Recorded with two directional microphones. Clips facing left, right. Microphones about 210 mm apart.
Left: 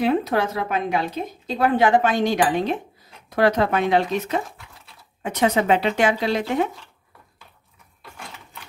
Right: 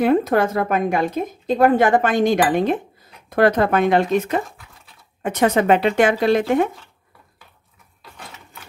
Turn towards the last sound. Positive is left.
turn(degrees=-50)  # may be behind; listen again after turning